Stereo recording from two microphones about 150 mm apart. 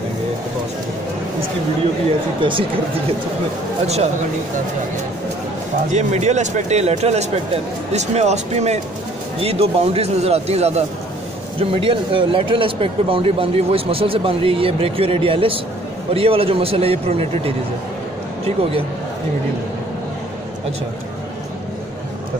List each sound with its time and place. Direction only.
3.8 s speech: 45° right (ahead or behind)
5.9 s speech: 50° right (ahead or behind)